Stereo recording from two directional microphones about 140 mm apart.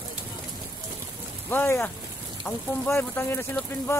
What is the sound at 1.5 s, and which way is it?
Speech, 15° left (ahead or behind).